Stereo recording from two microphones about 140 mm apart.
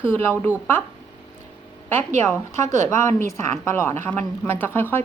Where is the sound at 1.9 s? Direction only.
15° left (ahead or behind).